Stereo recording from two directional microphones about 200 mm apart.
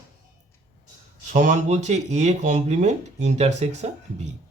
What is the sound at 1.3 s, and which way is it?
Speech, 40° right (ahead or behind).